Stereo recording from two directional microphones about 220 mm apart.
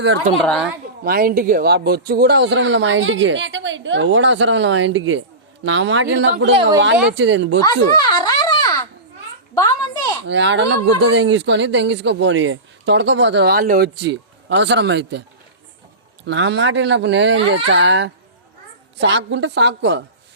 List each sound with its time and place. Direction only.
0.4 s a woman's voice: 5° left (ahead or behind)
1.0 s speech: 40° right (ahead or behind)
7.6 s a sound: 20° left (ahead or behind)
10.2 s speech: 55° right (ahead or behind)
16.2 s speech: 50° right (ahead or behind)